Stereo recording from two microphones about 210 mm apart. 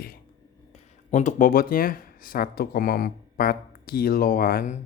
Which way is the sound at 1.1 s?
35° left (ahead or behind).